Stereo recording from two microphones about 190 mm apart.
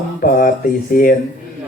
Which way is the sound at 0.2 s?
50° left (ahead or behind).